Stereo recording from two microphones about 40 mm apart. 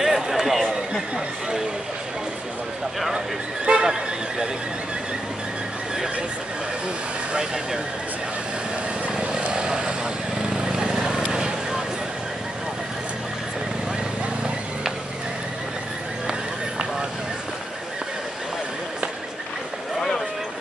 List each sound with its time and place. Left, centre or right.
0.0 s a sound: centre
3.6 s neigh: right
7.3 s speech: centre
9.2 s vehicle: right